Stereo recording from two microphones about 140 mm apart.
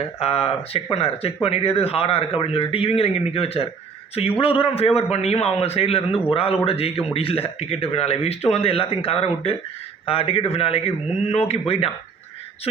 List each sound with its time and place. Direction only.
0.0 s a man's voice: 45° left (ahead or behind)